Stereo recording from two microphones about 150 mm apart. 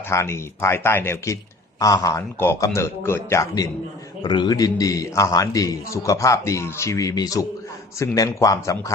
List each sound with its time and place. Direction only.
0.1 s a man's voice: 20° left (ahead or behind)